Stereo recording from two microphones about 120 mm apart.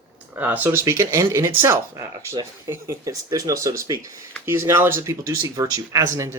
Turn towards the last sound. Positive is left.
turn(degrees=-25)  # may be behind; listen again after turning